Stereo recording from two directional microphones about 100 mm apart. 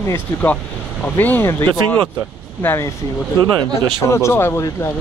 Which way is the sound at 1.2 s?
20° left (ahead or behind).